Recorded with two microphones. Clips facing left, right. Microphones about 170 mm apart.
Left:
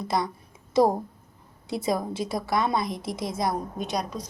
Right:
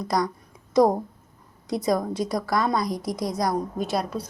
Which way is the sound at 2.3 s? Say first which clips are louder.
Right 1 dB; 25° left (ahead or behind).